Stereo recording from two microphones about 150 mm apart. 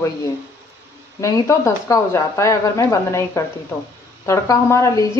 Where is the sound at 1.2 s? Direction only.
20° left (ahead or behind).